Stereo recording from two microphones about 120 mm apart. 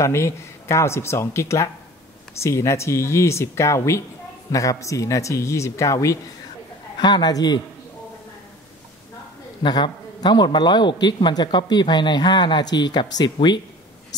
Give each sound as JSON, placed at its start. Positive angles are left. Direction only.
{"t": 0.0, "sound": "speech", "side_deg": 25}
{"t": 7.0, "sound": "a man's voice", "side_deg": 35}
{"t": 9.6, "sound": "a man's voice", "side_deg": 40}